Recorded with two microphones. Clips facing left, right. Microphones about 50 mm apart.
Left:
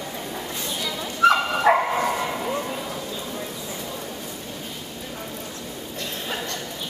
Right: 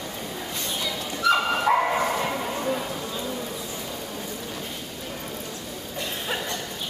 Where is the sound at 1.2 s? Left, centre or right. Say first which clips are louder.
Left 4 dB; left.